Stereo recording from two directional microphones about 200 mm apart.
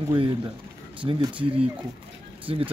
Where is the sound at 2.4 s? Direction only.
25° right (ahead or behind).